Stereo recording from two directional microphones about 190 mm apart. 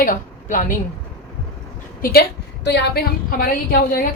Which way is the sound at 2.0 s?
55° left (ahead or behind).